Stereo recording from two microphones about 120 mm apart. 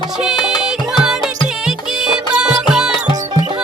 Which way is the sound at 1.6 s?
5° right (ahead or behind).